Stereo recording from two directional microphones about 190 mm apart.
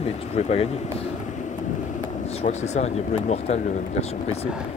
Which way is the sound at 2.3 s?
35° left (ahead or behind).